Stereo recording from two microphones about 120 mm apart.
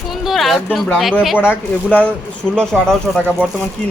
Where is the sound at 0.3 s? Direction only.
Centre (ahead or behind).